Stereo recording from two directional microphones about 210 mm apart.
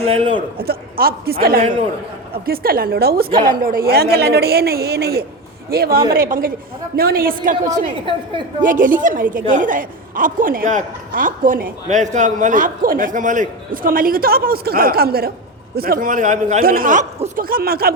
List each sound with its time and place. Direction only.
0.0 s a man's voice: 25° right (ahead or behind)
0.6 s a woman's voice: 45° right (ahead or behind)